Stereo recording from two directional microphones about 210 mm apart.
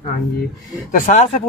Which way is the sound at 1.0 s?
35° left (ahead or behind).